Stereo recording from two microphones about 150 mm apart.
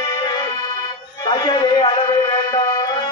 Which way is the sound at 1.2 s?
30° left (ahead or behind).